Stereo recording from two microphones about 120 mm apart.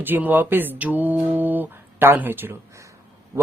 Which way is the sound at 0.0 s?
15° right (ahead or behind).